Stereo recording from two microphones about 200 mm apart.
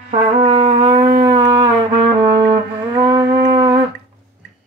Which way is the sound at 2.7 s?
20° right (ahead or behind).